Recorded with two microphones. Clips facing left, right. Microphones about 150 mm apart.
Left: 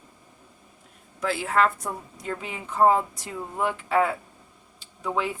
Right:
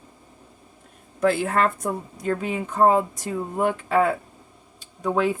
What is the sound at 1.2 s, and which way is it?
A woman's voice, 55° right (ahead or behind).